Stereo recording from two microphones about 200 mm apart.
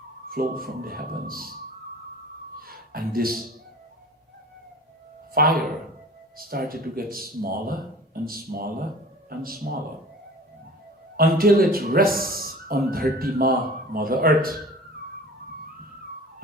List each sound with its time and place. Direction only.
0.3 s a man's voice: 50° right (ahead or behind)
2.6 s a sound: 45° right (ahead or behind)
5.3 s a man's voice: 45° right (ahead or behind)
11.2 s a man's voice: 45° right (ahead or behind)